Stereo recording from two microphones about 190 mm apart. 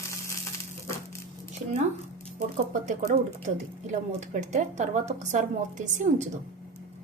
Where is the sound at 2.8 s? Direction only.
40° right (ahead or behind).